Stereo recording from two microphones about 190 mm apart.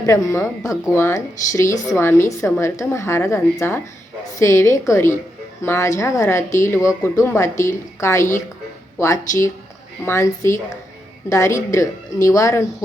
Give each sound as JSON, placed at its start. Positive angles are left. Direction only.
{"t": 0.0, "sound": "a woman's voice", "side_deg": 15}